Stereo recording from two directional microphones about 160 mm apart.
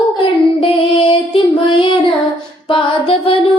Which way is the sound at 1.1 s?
35° left (ahead or behind).